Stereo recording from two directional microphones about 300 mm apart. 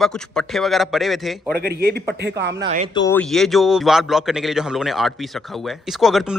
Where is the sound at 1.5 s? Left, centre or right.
Right.